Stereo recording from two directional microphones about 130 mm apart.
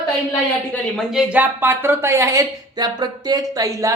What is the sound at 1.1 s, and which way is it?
Speech, 10° right (ahead or behind).